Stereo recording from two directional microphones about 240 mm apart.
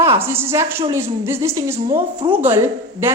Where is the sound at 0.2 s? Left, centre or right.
Centre.